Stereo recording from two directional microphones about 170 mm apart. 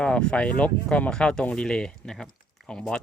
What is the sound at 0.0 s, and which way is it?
Speech, 5° left (ahead or behind).